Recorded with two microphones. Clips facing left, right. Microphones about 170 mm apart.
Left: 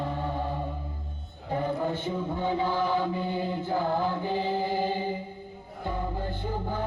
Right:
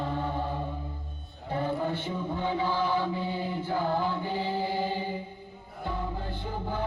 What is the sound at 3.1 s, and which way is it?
Choir, 20° left (ahead or behind).